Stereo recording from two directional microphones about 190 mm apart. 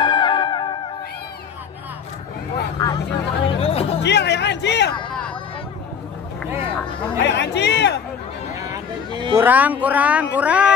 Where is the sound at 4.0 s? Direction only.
65° left (ahead or behind).